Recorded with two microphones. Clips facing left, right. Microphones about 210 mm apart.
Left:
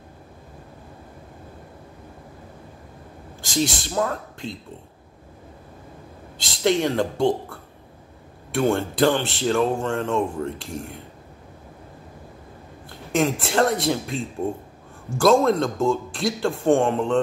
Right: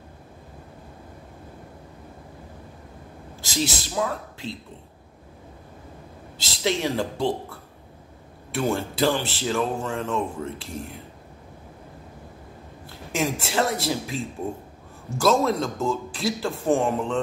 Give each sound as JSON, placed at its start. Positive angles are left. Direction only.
{"t": 3.4, "sound": "speech", "side_deg": -5}
{"t": 6.4, "sound": "speech", "side_deg": -5}
{"t": 13.2, "sound": "speech", "side_deg": -5}